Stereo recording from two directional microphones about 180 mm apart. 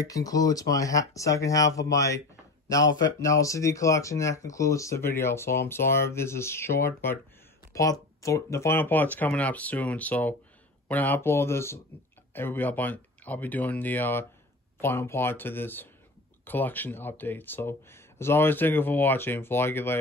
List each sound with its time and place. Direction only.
0.0 s speech: 20° left (ahead or behind)